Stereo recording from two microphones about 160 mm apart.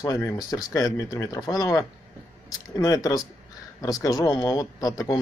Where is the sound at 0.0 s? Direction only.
20° left (ahead or behind).